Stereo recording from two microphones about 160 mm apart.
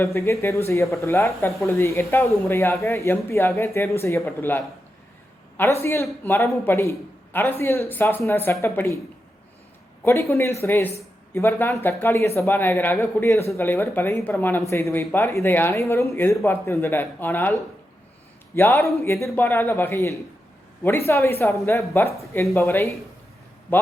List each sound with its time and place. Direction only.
0.0 s speech: 15° left (ahead or behind)
10.0 s speech: 15° left (ahead or behind)